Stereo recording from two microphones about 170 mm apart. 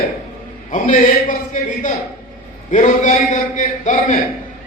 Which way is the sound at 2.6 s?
45° left (ahead or behind).